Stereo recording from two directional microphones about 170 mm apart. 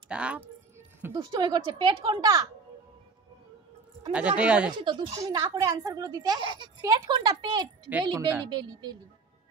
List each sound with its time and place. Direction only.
0.1 s speech: 5° right (ahead or behind)
1.1 s speech: 25° right (ahead or behind)
4.4 s speech: 5° right (ahead or behind)
4.7 s speech: 30° right (ahead or behind)